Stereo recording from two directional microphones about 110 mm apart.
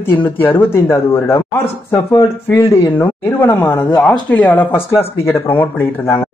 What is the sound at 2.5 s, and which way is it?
A man's voice, 25° left (ahead or behind).